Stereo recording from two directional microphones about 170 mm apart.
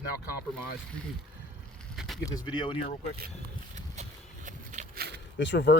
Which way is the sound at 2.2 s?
25° left (ahead or behind).